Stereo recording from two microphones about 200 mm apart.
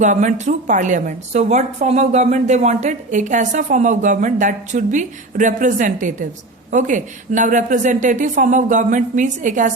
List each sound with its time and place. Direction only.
0.0 s a woman's voice: 40° right (ahead or behind)